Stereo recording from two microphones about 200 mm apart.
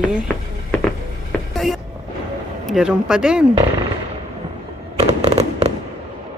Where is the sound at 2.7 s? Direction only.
5° right (ahead or behind).